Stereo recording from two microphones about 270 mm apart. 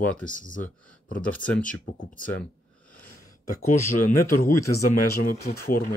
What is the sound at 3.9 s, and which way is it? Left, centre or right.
Speech, left.